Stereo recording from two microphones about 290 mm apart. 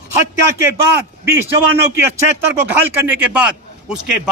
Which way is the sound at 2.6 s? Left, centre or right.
Centre.